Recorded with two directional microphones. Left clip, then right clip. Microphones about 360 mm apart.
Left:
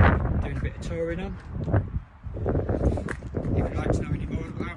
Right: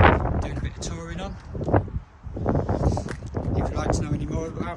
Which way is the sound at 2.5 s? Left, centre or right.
Centre.